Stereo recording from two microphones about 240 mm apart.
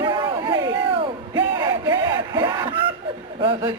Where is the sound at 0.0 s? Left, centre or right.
Centre.